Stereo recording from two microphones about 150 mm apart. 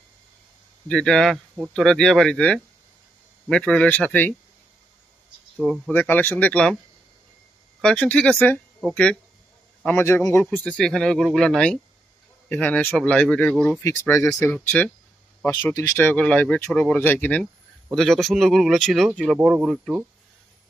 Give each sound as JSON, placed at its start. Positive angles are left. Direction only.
{"t": 0.9, "sound": "speech", "side_deg": 5}
{"t": 5.6, "sound": "speech", "side_deg": 0}
{"t": 5.9, "sound": "speech", "side_deg": 15}
{"t": 7.8, "sound": "speech", "side_deg": 10}
{"t": 9.8, "sound": "speech", "side_deg": 15}